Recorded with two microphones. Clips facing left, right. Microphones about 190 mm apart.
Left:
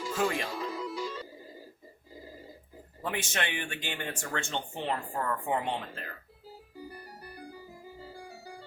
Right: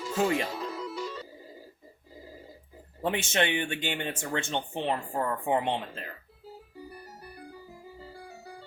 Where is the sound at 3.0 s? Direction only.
25° right (ahead or behind).